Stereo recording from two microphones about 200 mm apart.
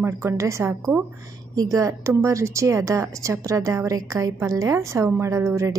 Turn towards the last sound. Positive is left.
turn(degrees=-15)  # may be behind; listen again after turning